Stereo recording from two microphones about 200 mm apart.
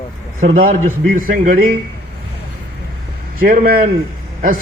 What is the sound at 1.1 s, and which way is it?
Speech, 45° right (ahead or behind).